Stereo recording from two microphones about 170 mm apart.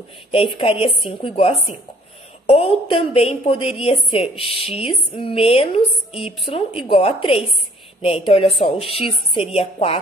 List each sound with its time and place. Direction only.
0.3 s a woman's voice: 30° left (ahead or behind)